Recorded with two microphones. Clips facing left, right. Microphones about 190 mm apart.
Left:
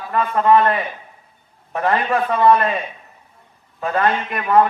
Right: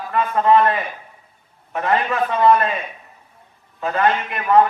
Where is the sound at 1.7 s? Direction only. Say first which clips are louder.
Left 1 dB; 30° left (ahead or behind).